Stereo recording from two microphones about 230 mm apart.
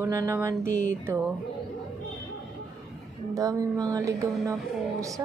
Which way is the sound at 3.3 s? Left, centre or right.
Centre.